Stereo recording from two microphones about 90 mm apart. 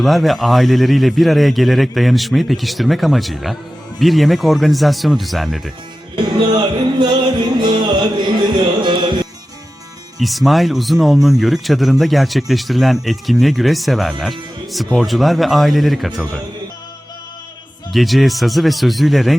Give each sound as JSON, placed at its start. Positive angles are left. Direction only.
{"t": 0.0, "sound": "speech", "side_deg": 0}
{"t": 6.1, "sound": "music", "side_deg": -55}
{"t": 10.2, "sound": "speech", "side_deg": 0}
{"t": 17.9, "sound": "speech", "side_deg": 0}